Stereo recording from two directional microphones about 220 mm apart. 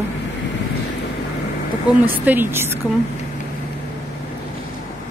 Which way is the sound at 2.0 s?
10° right (ahead or behind).